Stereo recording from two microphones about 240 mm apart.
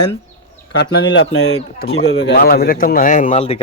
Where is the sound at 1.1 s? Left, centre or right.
Left.